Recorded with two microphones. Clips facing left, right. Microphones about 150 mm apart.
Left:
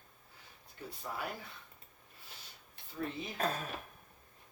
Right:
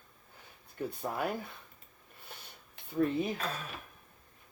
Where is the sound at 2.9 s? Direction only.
55° right (ahead or behind).